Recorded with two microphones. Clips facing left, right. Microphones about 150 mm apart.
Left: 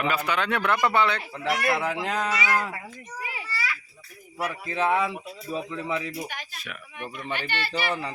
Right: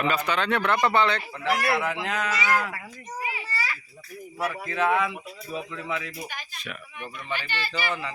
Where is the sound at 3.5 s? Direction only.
40° right (ahead or behind).